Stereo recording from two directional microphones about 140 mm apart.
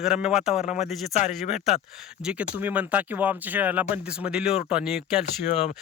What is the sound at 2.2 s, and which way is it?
Speech, 10° right (ahead or behind).